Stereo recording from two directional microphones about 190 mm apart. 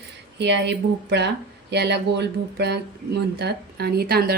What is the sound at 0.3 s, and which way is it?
A woman's voice, 65° right (ahead or behind).